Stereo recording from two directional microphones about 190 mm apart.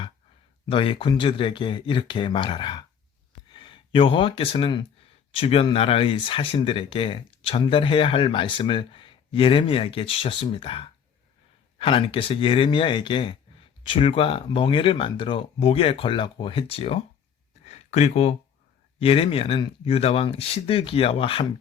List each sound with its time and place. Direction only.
0.7 s speech: 30° left (ahead or behind)